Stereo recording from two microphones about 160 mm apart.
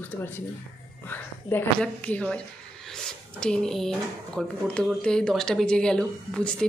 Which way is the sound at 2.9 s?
5° left (ahead or behind).